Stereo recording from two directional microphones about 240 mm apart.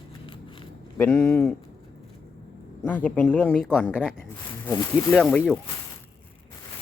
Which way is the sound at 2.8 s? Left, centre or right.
Centre.